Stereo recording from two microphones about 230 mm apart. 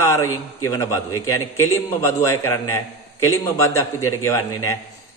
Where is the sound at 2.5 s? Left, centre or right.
Left.